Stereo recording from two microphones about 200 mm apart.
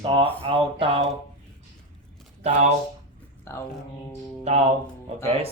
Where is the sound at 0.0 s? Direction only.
25° right (ahead or behind).